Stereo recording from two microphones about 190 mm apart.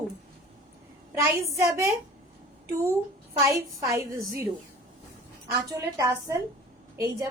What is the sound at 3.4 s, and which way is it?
Speech, 15° right (ahead or behind).